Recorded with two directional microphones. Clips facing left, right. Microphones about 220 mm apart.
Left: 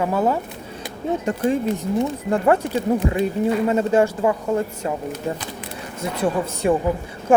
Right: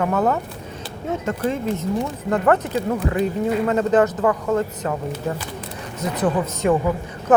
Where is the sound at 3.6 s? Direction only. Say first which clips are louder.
Right 2 dB; 10° left (ahead or behind).